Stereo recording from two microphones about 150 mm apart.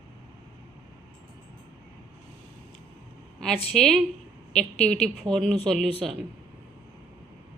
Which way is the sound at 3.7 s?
5° left (ahead or behind).